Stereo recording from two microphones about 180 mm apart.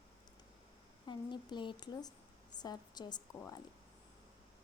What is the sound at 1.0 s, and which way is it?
A woman's voice, 25° left (ahead or behind).